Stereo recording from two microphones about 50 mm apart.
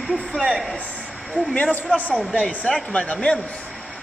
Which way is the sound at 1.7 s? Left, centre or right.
Left.